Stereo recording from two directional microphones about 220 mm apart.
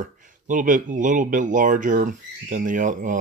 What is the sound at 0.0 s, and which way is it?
Speech, 35° right (ahead or behind).